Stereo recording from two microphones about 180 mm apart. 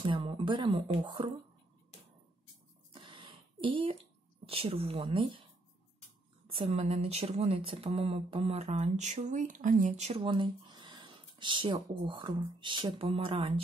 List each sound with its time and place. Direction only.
0.0 s speech: 30° right (ahead or behind)
2.9 s a sound: 30° right (ahead or behind)
4.5 s speech: 30° right (ahead or behind)
6.5 s speech: 35° right (ahead or behind)